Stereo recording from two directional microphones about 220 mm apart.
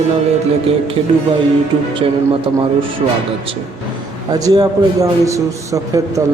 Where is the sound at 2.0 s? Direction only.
25° right (ahead or behind).